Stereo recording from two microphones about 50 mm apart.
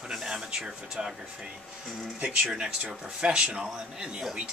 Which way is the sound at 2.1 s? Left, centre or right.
Right.